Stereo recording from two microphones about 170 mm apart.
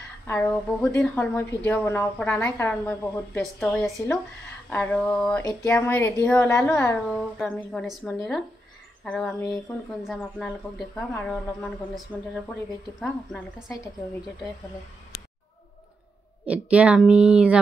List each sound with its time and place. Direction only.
0.3 s a woman's voice: 15° left (ahead or behind)
3.3 s a woman's voice: 5° left (ahead or behind)
7.1 s speech: centre (ahead or behind)
13.0 s speech: centre (ahead or behind)
16.4 s a woman's voice: 10° right (ahead or behind)